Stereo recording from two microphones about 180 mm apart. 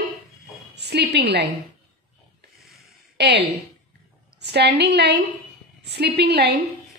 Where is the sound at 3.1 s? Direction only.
70° right (ahead or behind).